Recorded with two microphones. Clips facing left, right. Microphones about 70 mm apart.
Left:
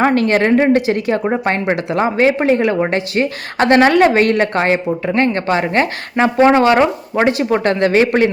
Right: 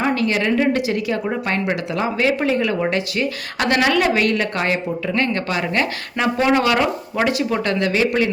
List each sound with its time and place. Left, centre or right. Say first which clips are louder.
0.0 s a woman's voice: left 6 dB; left